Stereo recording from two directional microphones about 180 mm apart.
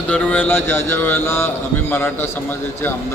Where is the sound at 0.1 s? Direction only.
10° left (ahead or behind).